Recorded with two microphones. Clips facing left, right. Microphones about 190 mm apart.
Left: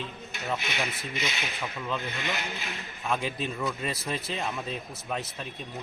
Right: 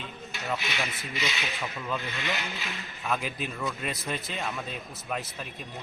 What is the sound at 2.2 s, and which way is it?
Speech, 50° left (ahead or behind).